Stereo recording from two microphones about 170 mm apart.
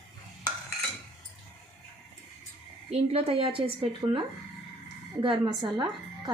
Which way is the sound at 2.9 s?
35° right (ahead or behind).